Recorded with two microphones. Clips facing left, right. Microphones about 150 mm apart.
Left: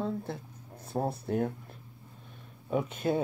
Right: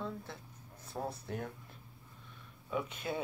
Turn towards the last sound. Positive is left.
turn(degrees=45)  # may be behind; listen again after turning